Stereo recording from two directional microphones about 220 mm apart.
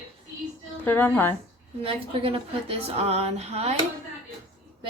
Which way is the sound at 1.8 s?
25° right (ahead or behind).